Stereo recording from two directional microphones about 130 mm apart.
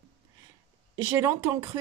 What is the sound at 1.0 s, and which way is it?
Speech, 15° right (ahead or behind).